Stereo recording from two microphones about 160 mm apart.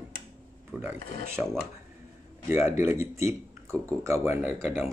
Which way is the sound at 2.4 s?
15° right (ahead or behind).